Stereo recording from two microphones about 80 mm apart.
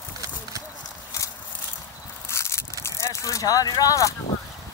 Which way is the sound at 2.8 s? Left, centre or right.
Left.